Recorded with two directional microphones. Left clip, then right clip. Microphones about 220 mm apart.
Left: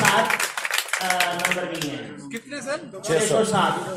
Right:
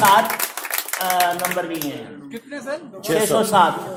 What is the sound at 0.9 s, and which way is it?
Speech, 50° right (ahead or behind).